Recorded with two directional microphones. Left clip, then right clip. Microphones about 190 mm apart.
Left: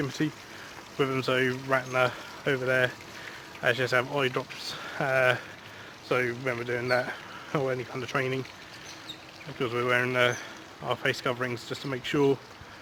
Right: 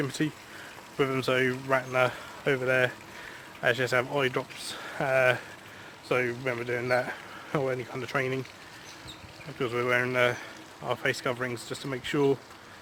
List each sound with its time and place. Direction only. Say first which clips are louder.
0.0 s speech: even; 25° right (ahead or behind)
9.6 s speech: even; 15° right (ahead or behind)